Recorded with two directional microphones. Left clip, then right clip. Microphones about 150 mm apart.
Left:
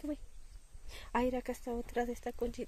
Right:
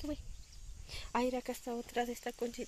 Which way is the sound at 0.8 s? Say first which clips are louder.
Left 1 dB; 15° left (ahead or behind).